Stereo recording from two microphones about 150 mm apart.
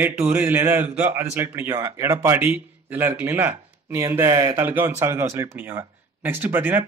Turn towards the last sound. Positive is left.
turn(degrees=-15)  # may be behind; listen again after turning